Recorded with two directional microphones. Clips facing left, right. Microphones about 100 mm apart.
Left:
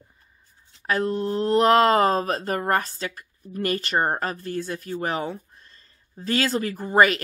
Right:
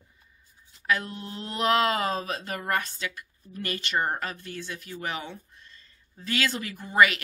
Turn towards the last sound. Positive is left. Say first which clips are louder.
# left 4 dB
turn(degrees=40)  # may be behind; listen again after turning